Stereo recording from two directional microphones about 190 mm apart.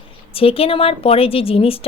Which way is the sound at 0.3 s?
30° left (ahead or behind).